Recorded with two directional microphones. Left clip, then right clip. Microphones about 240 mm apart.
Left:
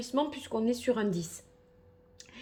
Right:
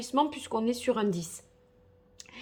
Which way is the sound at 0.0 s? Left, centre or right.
Centre.